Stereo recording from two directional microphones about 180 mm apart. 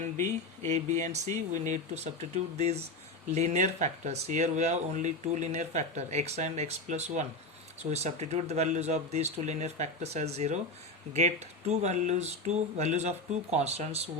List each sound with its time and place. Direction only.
0.0 s speech: 40° right (ahead or behind)